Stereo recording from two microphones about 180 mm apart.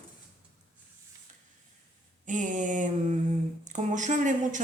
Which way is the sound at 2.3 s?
45° right (ahead or behind).